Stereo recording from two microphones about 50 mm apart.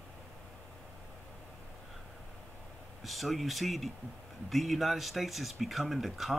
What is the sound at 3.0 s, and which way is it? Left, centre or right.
Speech, centre.